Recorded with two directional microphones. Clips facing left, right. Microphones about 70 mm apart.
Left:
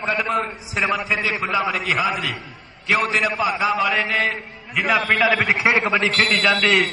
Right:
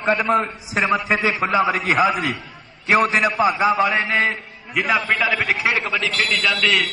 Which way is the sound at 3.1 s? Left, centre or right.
Right.